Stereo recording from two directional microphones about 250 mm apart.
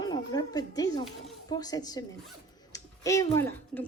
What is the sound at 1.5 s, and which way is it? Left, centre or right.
A woman's voice, centre.